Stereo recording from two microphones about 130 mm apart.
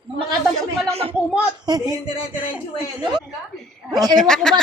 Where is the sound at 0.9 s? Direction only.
50° right (ahead or behind).